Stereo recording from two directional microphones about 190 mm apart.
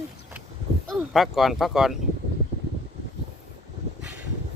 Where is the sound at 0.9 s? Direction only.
Centre (ahead or behind).